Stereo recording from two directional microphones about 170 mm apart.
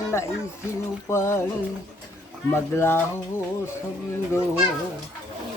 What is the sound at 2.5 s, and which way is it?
Female singing, 15° left (ahead or behind).